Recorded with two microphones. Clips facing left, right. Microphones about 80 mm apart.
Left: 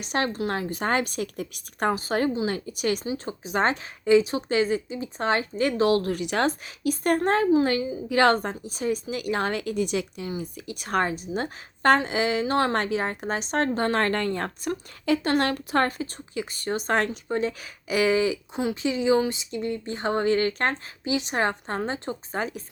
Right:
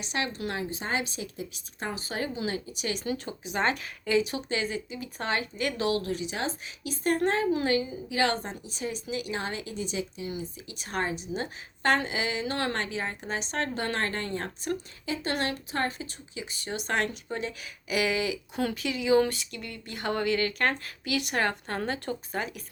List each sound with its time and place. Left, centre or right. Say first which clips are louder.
0.0 s speech: left 6 dB; left
2.0 s speech: left 8 dB; left
22.4 s speech: left 6 dB; left